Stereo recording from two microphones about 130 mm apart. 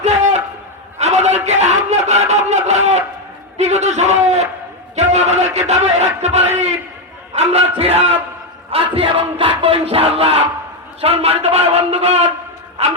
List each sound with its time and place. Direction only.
0.0 s a sound: 60° right (ahead or behind)
0.9 s a man's voice: 60° right (ahead or behind)
3.6 s music: 60° right (ahead or behind)
7.3 s a man's voice: 50° right (ahead or behind)
8.7 s music: 45° right (ahead or behind)